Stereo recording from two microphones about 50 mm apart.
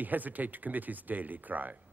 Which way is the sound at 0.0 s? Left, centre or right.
Right.